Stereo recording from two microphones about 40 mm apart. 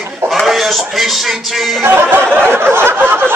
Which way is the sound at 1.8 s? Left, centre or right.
Right.